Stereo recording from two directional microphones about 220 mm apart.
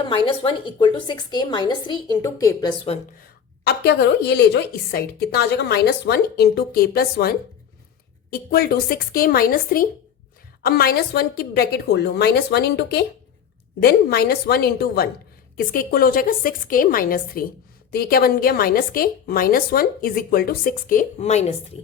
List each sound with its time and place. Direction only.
0.3 s a woman's voice: 20° left (ahead or behind)
3.7 s a woman's voice: 50° left (ahead or behind); by 21.5 s 30° left (ahead or behind)